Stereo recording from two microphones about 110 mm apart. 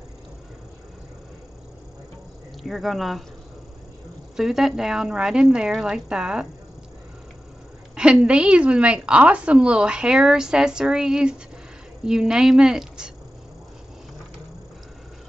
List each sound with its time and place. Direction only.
2.6 s a woman's voice: centre (ahead or behind)
4.4 s a woman's voice: 5° right (ahead or behind)
7.9 s a woman's voice: 10° right (ahead or behind)